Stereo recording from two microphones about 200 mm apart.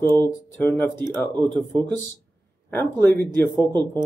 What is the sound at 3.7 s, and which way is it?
Speech, 20° right (ahead or behind).